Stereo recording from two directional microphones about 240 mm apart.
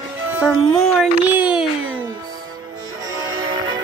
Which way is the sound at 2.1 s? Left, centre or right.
Centre.